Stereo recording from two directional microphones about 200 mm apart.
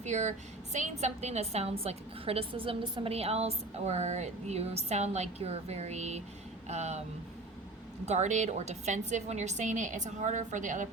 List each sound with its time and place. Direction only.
0.0 s a woman's voice: 35° right (ahead or behind)
8.0 s a woman's voice: 35° right (ahead or behind)